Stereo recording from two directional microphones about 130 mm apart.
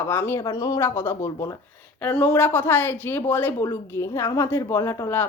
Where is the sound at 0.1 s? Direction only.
15° left (ahead or behind).